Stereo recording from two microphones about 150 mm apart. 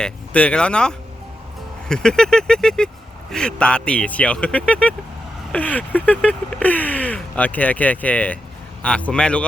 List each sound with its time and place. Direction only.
0.0 s speech: 5° left (ahead or behind)
1.9 s a sound: 5° left (ahead or behind)
3.3 s speech: 5° left (ahead or behind)